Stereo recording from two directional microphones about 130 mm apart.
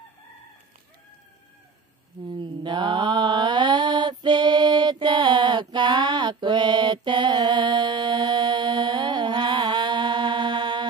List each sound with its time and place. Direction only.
2.3 s mantra: 35° right (ahead or behind)